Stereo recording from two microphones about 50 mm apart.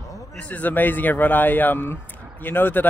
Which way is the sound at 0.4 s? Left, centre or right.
Left.